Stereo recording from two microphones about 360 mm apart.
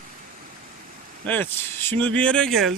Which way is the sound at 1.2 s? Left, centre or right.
Centre.